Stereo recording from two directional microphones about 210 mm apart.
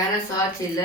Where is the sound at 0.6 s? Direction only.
15° left (ahead or behind).